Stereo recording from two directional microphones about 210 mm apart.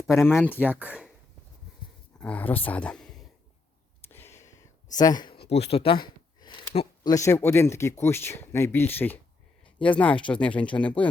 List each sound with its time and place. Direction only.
0.1 s speech: 10° left (ahead or behind)
0.6 s speech: 5° right (ahead or behind)
2.1 s speech: 5° left (ahead or behind)
4.1 s a sound: 10° left (ahead or behind)
5.7 s speech: 25° left (ahead or behind); by 11.1 s 5° left (ahead or behind)